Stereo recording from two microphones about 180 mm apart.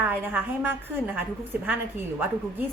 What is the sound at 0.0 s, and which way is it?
Speech, 10° right (ahead or behind).